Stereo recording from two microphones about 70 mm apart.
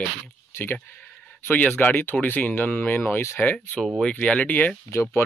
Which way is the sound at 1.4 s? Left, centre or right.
Left.